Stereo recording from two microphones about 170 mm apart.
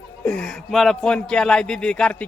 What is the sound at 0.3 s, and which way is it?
Speech, 5° left (ahead or behind).